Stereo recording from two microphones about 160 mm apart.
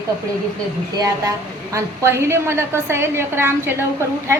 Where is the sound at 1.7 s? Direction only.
15° right (ahead or behind).